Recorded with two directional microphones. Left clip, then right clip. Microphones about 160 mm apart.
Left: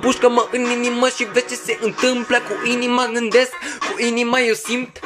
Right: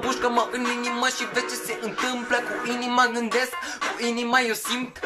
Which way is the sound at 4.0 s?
20° left (ahead or behind).